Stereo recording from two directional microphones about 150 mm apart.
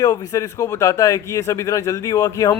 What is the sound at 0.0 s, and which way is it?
Speech, 25° left (ahead or behind).